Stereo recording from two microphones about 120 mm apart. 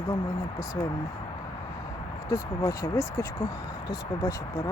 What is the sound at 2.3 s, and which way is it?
Speech, 25° left (ahead or behind).